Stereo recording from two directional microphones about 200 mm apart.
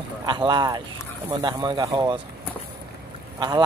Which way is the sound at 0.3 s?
20° right (ahead or behind).